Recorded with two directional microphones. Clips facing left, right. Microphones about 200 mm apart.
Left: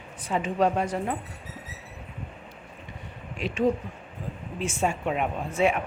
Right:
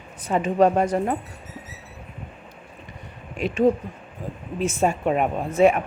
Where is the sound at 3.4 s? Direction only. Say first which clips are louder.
Right 5 dB; 45° right (ahead or behind).